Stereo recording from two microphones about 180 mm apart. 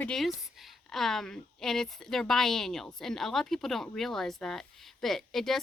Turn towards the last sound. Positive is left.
turn(degrees=0)  # may be behind; listen again after turning